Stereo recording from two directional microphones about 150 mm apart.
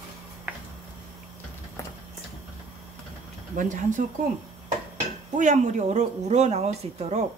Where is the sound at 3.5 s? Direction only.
60° right (ahead or behind).